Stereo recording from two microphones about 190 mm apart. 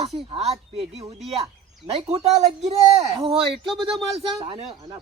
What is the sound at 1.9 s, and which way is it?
A man's voice, 30° right (ahead or behind).